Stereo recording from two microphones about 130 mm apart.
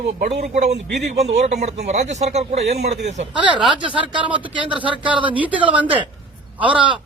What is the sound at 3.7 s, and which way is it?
Speech, 40° right (ahead or behind).